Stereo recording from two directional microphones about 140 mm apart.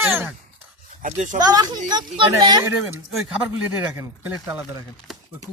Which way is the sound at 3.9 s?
15° right (ahead or behind).